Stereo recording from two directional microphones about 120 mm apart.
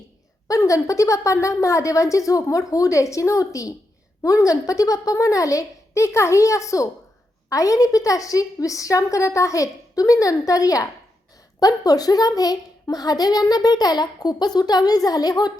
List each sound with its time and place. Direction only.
0.4 s a woman's voice: 30° left (ahead or behind)